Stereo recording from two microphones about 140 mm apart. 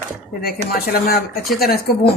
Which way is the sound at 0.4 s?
90° left.